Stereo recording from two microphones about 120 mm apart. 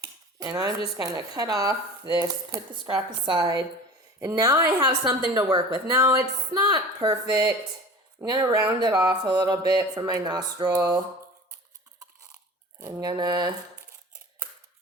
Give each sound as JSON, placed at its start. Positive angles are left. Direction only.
{"t": 0.0, "sound": "cutlery", "side_deg": -35}
{"t": 0.5, "sound": "speech", "side_deg": -25}
{"t": 2.8, "sound": "speech", "side_deg": -40}
{"t": 13.0, "sound": "speech", "side_deg": -35}